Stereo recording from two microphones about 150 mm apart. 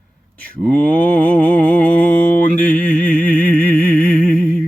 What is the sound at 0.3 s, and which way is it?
Mantra, 10° left (ahead or behind).